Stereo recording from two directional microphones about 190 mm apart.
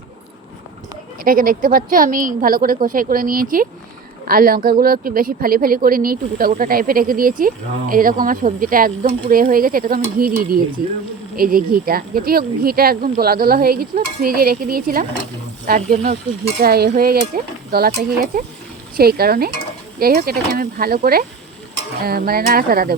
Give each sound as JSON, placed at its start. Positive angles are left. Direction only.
{"t": 1.2, "sound": "speech", "side_deg": -50}
{"t": 18.9, "sound": "speech", "side_deg": -55}